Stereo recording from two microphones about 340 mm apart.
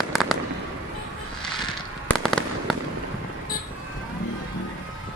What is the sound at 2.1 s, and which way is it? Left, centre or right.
Fireworks, centre.